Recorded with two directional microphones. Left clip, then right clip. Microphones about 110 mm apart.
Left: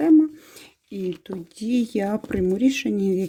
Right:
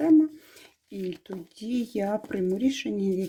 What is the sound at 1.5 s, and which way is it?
Speech, 45° left (ahead or behind).